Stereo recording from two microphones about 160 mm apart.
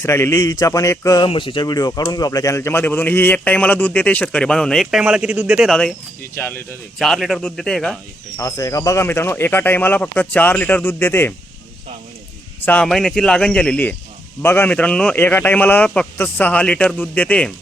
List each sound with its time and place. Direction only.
0.0 s a man's voice: 15° left (ahead or behind)
6.3 s speech: 15° left (ahead or behind)
7.0 s speech: centre (ahead or behind)
8.4 s speech: 20° left (ahead or behind)
12.6 s speech: 5° left (ahead or behind)